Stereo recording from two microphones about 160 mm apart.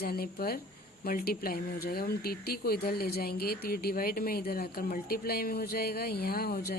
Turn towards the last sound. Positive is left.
turn(degrees=70)  # may be behind; listen again after turning